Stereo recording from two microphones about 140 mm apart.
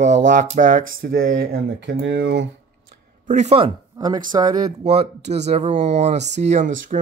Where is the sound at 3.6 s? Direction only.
30° right (ahead or behind).